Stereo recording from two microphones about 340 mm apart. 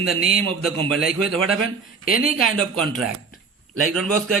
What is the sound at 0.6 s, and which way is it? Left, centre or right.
Speech, centre.